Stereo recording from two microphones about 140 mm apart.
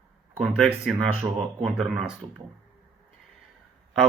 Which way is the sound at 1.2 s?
20° right (ahead or behind).